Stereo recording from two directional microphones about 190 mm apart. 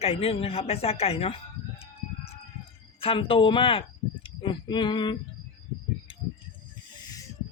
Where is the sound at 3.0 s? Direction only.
30° left (ahead or behind).